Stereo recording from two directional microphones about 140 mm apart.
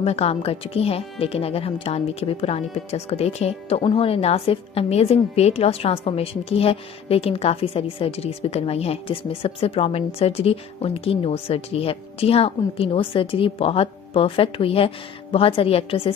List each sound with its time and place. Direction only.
0.0 s a woman's voice: 45° left (ahead or behind)